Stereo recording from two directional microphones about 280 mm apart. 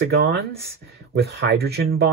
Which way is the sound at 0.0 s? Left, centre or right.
Right.